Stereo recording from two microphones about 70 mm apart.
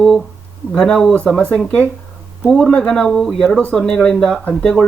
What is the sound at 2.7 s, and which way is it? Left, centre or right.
Speech, centre.